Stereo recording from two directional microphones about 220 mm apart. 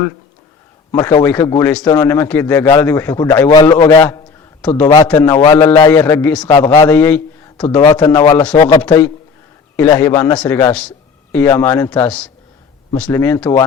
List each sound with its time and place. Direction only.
0.9 s a man's voice: 15° left (ahead or behind)
7.8 s a man's voice: 20° left (ahead or behind)